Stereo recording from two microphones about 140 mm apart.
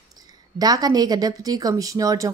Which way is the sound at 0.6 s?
30° right (ahead or behind).